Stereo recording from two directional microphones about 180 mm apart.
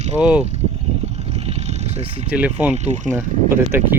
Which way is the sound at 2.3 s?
10° right (ahead or behind).